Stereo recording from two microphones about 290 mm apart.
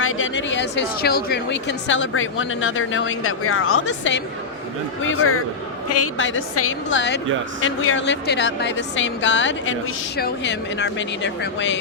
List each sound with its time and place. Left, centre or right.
0.0 s a woman's voice: left